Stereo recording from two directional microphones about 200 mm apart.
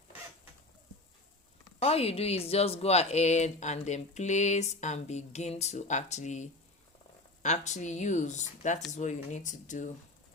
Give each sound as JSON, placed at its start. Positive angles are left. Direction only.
{"t": 1.8, "sound": "speech", "side_deg": 30}